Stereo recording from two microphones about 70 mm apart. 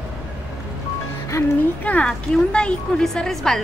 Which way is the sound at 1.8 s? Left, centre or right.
Left.